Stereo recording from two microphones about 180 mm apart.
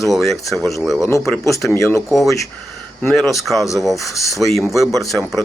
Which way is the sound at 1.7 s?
15° left (ahead or behind).